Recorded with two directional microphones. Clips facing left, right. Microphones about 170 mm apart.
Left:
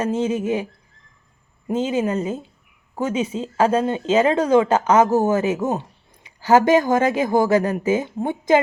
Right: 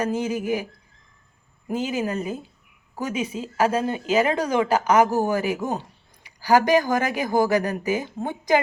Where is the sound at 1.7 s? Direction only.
25° left (ahead or behind).